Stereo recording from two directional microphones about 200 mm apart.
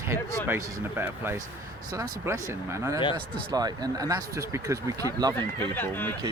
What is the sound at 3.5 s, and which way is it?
Speech, 20° right (ahead or behind).